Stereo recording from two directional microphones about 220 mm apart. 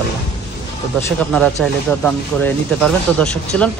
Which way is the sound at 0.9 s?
10° left (ahead or behind).